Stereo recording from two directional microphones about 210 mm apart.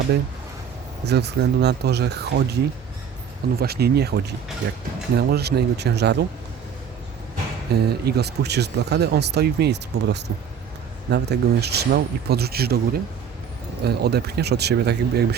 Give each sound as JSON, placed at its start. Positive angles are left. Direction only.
{"t": 1.0, "sound": "speech", "side_deg": -50}
{"t": 7.7, "sound": "speech", "side_deg": -50}